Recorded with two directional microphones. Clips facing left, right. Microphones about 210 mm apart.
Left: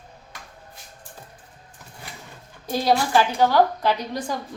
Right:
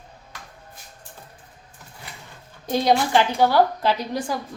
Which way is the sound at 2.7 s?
20° right (ahead or behind).